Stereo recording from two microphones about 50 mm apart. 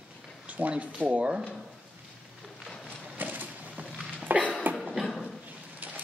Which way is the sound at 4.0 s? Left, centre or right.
Right.